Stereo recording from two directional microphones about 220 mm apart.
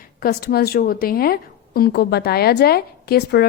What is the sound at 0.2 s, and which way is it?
A woman's voice, 45° left (ahead or behind).